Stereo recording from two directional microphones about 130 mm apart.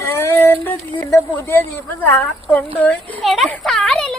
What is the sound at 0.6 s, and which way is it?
Music, 15° left (ahead or behind).